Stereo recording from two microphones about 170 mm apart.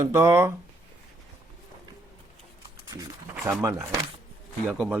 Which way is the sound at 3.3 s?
10° right (ahead or behind).